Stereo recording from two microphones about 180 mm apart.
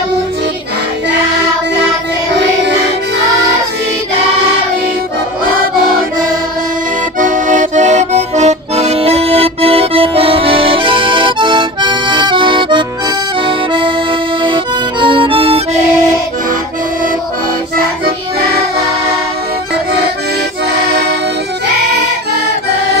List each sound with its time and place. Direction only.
7.2 s accordion: 45° right (ahead or behind); by 13.9 s 25° right (ahead or behind)
14.4 s music: 25° right (ahead or behind)